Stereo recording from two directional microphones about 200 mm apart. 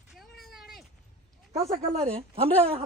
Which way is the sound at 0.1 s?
Centre (ahead or behind).